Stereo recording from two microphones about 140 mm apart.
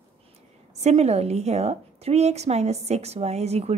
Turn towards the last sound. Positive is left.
turn(degrees=-50)  # may be behind; listen again after turning